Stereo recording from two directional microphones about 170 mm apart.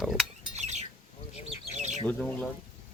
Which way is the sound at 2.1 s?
5° left (ahead or behind).